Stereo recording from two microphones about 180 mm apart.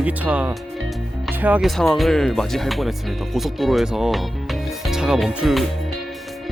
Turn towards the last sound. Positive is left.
turn(degrees=0)  # may be behind; listen again after turning